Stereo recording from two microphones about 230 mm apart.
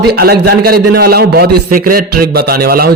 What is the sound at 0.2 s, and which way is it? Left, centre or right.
A man's voice, right.